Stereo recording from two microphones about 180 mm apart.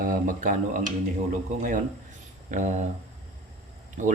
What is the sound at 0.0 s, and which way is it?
Speech, 45° right (ahead or behind).